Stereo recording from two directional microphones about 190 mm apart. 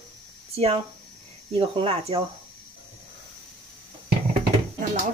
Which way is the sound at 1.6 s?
30° right (ahead or behind).